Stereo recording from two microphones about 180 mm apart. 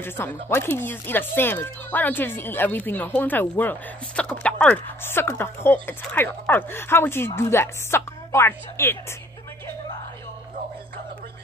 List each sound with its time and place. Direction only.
0.0 s speech: 10° left (ahead or behind)